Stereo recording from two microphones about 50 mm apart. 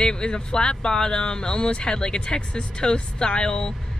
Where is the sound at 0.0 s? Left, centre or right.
Centre.